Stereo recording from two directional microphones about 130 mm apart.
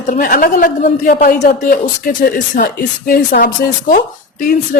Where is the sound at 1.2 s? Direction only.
80° left.